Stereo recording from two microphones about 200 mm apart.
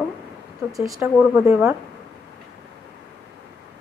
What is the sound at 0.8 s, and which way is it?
Speech, 15° right (ahead or behind).